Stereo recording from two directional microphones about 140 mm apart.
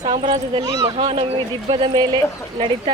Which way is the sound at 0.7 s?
25° right (ahead or behind).